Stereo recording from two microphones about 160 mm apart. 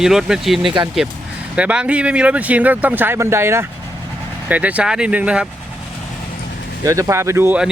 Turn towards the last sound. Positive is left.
turn(degrees=-10)  # may be behind; listen again after turning